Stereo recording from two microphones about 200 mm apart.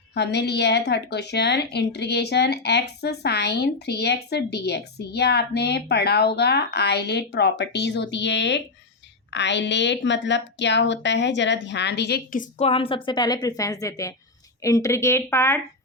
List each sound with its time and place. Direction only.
0.1 s a woman's voice: 60° left (ahead or behind); by 15.6 s 15° left (ahead or behind)